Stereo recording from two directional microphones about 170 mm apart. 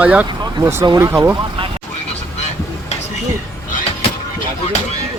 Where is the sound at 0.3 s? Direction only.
25° right (ahead or behind).